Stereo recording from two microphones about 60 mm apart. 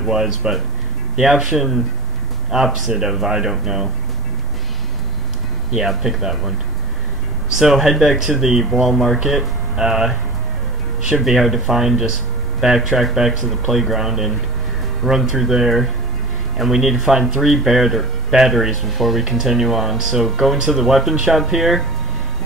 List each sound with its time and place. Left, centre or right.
0.0 s speech: centre
5.7 s speech: centre
7.5 s speech: centre
11.1 s speech: centre